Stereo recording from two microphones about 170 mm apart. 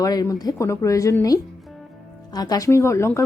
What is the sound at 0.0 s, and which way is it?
A woman's voice, 20° left (ahead or behind).